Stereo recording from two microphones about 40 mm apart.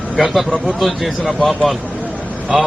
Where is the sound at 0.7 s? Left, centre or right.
Centre.